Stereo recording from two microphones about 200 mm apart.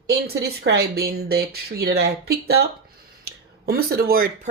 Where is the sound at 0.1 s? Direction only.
55° right (ahead or behind).